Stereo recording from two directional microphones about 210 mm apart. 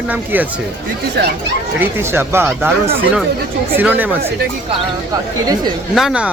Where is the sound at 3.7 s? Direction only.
10° right (ahead or behind).